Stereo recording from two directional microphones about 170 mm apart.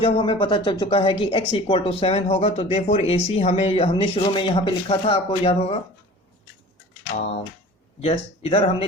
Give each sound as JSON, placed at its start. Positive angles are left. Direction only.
{"t": 0.0, "sound": "speech", "side_deg": 30}
{"t": 8.0, "sound": "speech", "side_deg": 35}